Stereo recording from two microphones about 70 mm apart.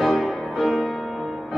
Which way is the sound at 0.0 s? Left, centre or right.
Centre.